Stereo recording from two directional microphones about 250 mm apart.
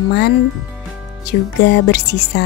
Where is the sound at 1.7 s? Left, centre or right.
Left.